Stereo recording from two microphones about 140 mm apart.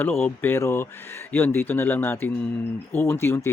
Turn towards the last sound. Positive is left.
turn(degrees=15)  # may be behind; listen again after turning